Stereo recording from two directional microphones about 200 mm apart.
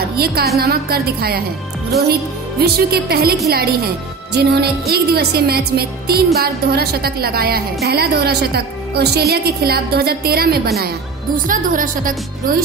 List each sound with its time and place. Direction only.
0.2 s speech: 50° right (ahead or behind)
2.6 s speech: 50° right (ahead or behind)